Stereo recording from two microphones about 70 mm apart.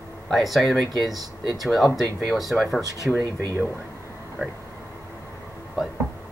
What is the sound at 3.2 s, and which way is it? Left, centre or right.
Speech, right.